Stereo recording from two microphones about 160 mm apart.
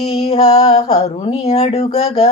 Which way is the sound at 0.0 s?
40° left (ahead or behind).